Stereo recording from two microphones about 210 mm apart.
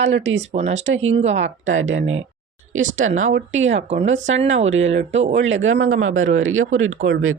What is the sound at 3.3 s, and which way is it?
Speech, 65° right (ahead or behind).